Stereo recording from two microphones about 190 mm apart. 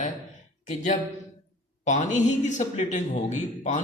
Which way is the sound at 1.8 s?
40° left (ahead or behind).